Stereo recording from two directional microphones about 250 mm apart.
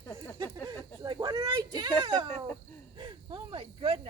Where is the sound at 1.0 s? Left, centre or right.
Centre.